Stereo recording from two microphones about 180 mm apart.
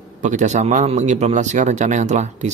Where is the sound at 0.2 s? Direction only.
45° right (ahead or behind).